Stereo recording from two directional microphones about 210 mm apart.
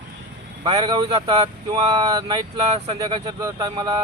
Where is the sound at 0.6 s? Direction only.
20° right (ahead or behind).